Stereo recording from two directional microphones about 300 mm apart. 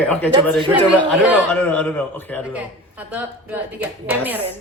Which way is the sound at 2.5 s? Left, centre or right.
Centre.